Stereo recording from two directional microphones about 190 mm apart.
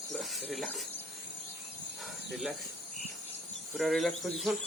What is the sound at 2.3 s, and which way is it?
Speech, centre (ahead or behind).